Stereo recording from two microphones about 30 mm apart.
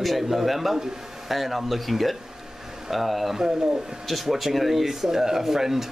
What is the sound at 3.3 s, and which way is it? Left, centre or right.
Speech, centre.